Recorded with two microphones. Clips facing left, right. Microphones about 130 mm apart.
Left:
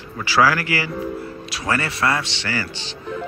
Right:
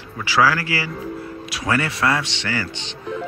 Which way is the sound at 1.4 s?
15° right (ahead or behind).